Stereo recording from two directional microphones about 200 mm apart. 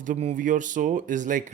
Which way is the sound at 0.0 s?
35° right (ahead or behind).